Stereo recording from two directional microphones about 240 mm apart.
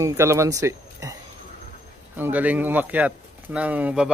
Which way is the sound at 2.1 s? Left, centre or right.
Centre.